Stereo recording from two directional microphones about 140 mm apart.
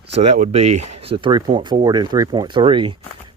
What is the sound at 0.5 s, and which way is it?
Speech, 45° right (ahead or behind).